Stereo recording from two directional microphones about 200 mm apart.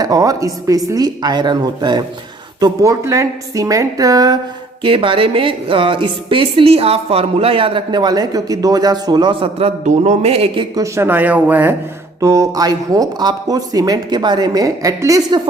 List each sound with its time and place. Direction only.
0.0 s a woman's voice: 15° right (ahead or behind)